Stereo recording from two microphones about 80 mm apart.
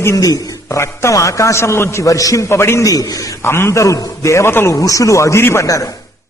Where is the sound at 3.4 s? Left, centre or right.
Left.